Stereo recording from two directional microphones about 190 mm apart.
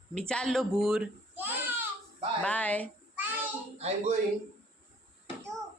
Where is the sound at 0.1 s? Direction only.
5° left (ahead or behind).